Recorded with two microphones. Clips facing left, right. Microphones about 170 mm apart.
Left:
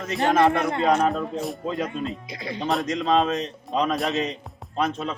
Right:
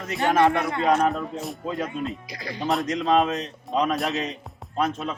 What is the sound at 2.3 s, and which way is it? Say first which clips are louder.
Speech: left 2 dB; 25° left (ahead or behind).